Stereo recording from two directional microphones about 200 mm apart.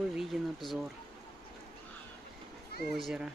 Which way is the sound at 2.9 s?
Centre (ahead or behind).